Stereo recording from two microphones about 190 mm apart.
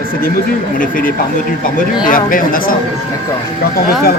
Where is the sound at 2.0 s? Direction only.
45° left (ahead or behind).